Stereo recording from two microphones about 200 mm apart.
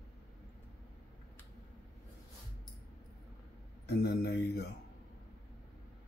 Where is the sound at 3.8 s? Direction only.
55° left (ahead or behind).